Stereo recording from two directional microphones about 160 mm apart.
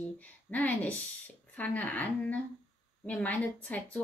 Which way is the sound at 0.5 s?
10° left (ahead or behind).